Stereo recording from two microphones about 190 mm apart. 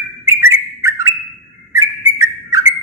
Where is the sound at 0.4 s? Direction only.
15° right (ahead or behind).